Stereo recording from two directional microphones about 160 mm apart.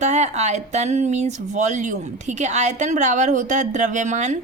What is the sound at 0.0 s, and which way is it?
Speech, 45° right (ahead or behind).